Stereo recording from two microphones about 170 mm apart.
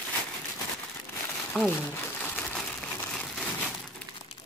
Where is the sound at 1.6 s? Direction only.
10° left (ahead or behind).